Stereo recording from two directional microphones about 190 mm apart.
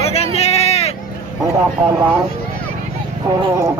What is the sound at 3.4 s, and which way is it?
Chicken, 15° right (ahead or behind).